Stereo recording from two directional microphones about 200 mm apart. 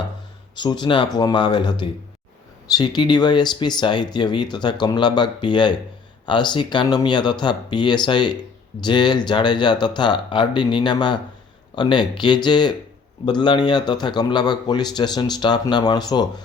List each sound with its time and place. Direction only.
0.5 s a man's voice: 20° left (ahead or behind)